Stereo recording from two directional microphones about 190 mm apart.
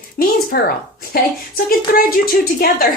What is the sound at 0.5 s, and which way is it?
Speech, 55° left (ahead or behind).